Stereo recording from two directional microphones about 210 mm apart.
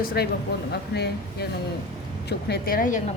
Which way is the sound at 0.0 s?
45° left (ahead or behind).